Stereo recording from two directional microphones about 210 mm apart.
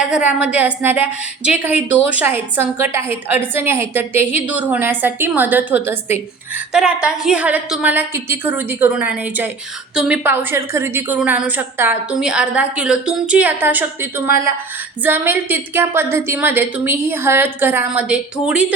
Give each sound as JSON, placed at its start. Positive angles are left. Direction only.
{"t": 0.0, "sound": "a woman's voice", "side_deg": -5}
{"t": 14.3, "sound": "speech", "side_deg": 45}
{"t": 15.0, "sound": "a woman's voice", "side_deg": -10}